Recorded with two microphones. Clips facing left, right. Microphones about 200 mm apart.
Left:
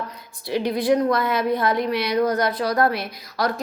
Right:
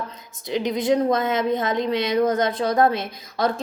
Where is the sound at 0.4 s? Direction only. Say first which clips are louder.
Left 1 dB; 20° right (ahead or behind).